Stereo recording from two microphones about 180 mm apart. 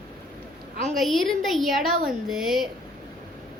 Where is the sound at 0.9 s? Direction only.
Centre (ahead or behind).